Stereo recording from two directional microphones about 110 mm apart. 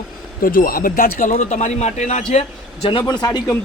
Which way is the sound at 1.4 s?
90° left.